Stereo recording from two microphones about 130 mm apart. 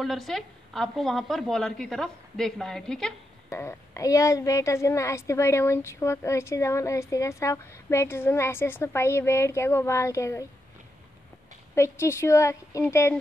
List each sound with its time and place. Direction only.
0.0 s a woman's voice: centre (ahead or behind)
3.4 s a woman's voice: 20° left (ahead or behind)
11.7 s a woman's voice: 20° left (ahead or behind)